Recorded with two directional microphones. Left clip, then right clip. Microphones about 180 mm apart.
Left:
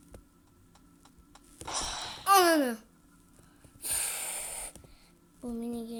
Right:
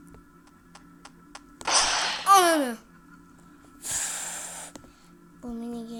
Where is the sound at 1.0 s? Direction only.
50° right (ahead or behind).